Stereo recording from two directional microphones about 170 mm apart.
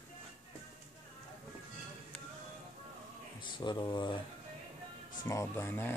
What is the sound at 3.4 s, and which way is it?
Speech, 25° left (ahead or behind).